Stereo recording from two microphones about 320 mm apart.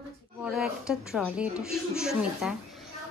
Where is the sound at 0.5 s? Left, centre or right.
Centre.